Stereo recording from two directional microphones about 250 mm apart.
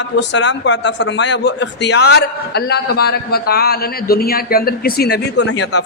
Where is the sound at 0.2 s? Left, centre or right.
Left.